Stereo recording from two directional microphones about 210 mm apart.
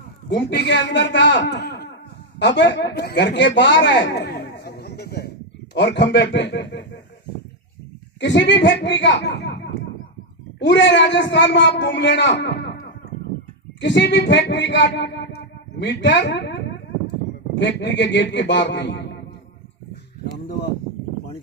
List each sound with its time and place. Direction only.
0.3 s speech: 55° left (ahead or behind)
8.2 s speech: 60° left (ahead or behind)
17.6 s speech: 55° left (ahead or behind)